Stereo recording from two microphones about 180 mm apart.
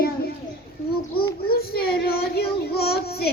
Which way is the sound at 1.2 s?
60° left (ahead or behind).